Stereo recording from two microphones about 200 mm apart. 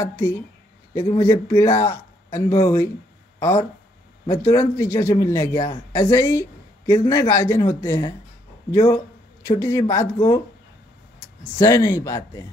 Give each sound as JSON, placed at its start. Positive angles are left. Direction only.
{"t": 0.0, "sound": "speech", "side_deg": 10}
{"t": 11.5, "sound": "speech", "side_deg": 15}